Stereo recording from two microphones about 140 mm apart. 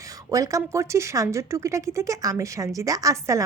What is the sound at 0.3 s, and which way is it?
Speech, 25° right (ahead or behind).